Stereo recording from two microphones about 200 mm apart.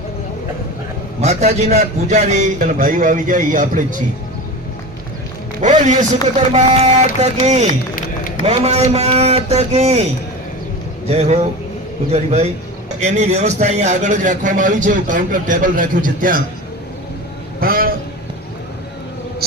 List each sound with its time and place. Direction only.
1.2 s a man's voice: 35° right (ahead or behind)
5.6 s a man's voice: 35° right (ahead or behind)
7.9 s a sound: 45° left (ahead or behind)
8.4 s a man's voice: 30° right (ahead or behind)
11.1 s a man's voice: 30° right (ahead or behind)
17.6 s a sound: 45° right (ahead or behind)